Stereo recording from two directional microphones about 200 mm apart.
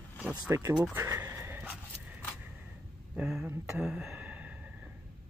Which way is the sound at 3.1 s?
5° right (ahead or behind).